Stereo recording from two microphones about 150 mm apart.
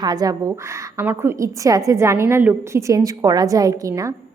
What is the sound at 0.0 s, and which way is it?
A woman's voice, 25° right (ahead or behind).